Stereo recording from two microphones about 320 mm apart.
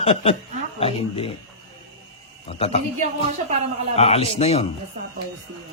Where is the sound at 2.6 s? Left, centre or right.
Centre.